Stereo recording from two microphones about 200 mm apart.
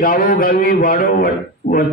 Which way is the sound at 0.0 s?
45° left (ahead or behind).